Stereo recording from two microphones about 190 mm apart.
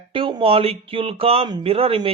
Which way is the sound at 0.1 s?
25° right (ahead or behind).